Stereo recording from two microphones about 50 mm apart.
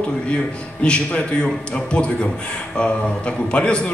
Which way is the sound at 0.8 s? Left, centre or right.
Centre.